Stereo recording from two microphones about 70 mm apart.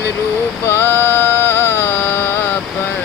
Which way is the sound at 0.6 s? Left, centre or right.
Left.